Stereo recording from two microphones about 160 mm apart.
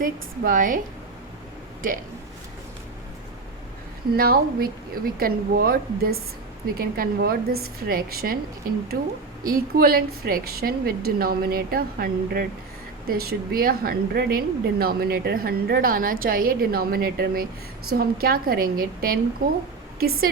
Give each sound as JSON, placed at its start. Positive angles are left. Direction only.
{"t": 0.0, "sound": "a woman's voice", "side_deg": -55}
{"t": 4.1, "sound": "a woman's voice", "side_deg": -70}